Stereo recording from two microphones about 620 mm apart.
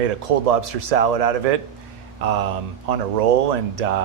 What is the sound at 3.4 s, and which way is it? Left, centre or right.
Speech, right.